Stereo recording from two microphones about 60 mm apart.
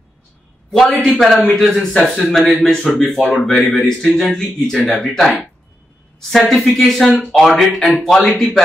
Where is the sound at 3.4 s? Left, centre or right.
Centre.